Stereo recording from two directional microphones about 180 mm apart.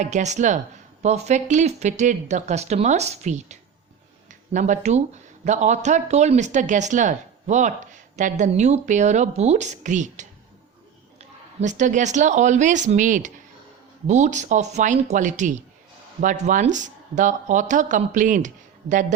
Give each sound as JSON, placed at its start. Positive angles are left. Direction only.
{"t": 0.0, "sound": "speech", "side_deg": -40}